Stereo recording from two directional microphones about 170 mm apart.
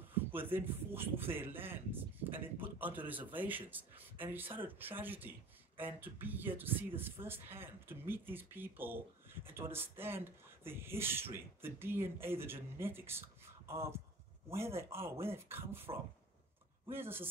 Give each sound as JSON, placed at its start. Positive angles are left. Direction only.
{"t": 0.3, "sound": "speech", "side_deg": -10}